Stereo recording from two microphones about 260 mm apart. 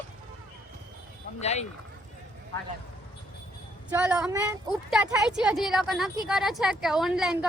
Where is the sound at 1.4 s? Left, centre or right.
Left.